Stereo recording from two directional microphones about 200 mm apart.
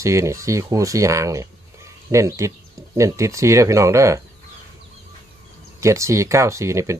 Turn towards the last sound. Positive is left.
turn(degrees=-15)  # may be behind; listen again after turning